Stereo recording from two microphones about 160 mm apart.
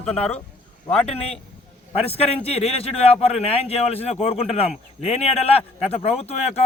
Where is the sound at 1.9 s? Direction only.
40° left (ahead or behind).